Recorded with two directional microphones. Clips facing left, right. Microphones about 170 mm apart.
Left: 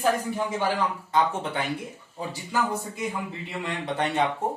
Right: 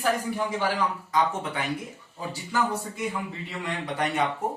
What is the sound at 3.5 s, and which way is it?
Speech, 30° left (ahead or behind).